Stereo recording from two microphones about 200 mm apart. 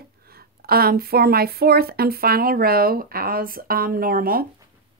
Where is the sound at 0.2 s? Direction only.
50° right (ahead or behind).